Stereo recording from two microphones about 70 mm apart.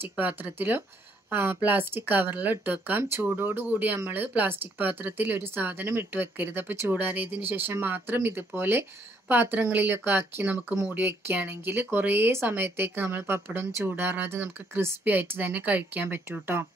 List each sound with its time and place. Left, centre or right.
0.2 s speech: right
3.0 s speech: right